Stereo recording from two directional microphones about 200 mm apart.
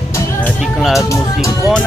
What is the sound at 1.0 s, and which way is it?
Music, 15° left (ahead or behind).